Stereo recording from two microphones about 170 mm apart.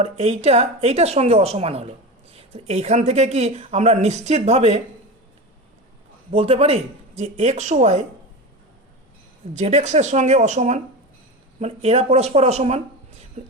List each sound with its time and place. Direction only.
0.0 s speech: 40° right (ahead or behind)
6.3 s speech: 35° right (ahead or behind)
9.6 s speech: 40° right (ahead or behind)